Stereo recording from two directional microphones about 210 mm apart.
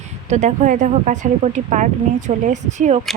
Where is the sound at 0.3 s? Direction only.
35° right (ahead or behind).